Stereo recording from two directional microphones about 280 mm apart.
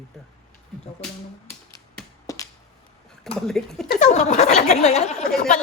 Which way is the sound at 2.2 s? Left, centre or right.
Centre.